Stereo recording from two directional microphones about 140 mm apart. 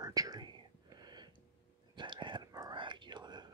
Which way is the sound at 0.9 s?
30° right (ahead or behind).